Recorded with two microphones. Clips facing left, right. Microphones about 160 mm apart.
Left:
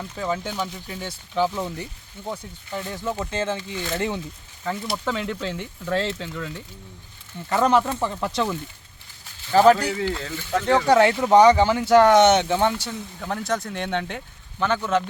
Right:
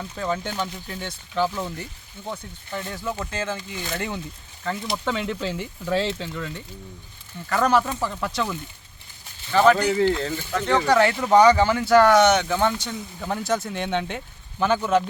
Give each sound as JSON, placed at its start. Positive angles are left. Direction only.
{"t": 0.0, "sound": "speech", "side_deg": 5}
{"t": 4.6, "sound": "speech", "side_deg": 5}
{"t": 7.5, "sound": "speech", "side_deg": 25}
{"t": 13.0, "sound": "speech", "side_deg": -5}